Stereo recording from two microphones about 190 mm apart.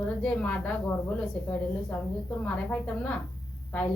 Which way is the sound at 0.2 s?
5° left (ahead or behind).